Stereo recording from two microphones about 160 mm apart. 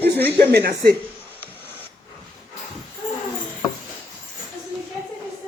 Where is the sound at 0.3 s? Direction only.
75° right (ahead or behind).